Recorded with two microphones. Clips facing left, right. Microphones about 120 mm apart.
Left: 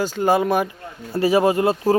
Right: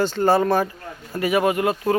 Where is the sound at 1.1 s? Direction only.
30° left (ahead or behind).